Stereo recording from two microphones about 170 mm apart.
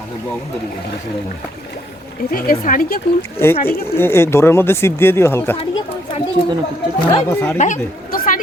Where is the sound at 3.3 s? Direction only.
15° left (ahead or behind).